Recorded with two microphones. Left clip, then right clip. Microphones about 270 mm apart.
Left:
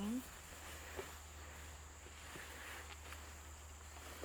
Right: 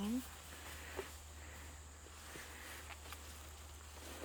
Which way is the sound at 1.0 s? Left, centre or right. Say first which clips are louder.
Right 2 dB; centre.